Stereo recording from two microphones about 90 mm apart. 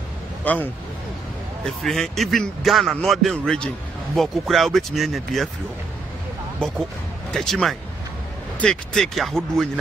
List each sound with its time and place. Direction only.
0.4 s speech: 20° left (ahead or behind)
1.6 s a man's voice: 5° left (ahead or behind)
6.6 s a man's voice: 10° left (ahead or behind)